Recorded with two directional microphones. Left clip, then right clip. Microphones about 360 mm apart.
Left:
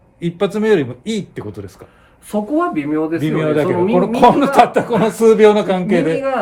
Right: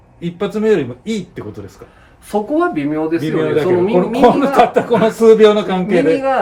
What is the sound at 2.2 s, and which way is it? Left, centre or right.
Speech, centre.